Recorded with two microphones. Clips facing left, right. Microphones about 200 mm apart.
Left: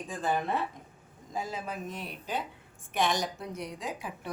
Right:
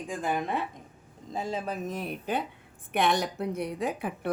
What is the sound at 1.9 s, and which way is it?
A woman's voice, 50° right (ahead or behind).